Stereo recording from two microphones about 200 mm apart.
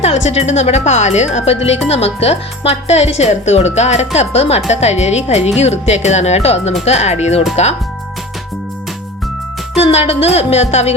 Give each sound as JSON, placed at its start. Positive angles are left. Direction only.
{"t": 0.3, "sound": "speech", "side_deg": 35}
{"t": 9.7, "sound": "speech", "side_deg": 30}